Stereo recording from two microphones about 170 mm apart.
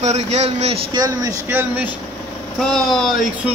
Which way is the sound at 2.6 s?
Centre (ahead or behind).